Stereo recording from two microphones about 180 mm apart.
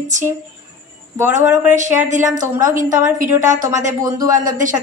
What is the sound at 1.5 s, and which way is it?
Speech, 10° right (ahead or behind).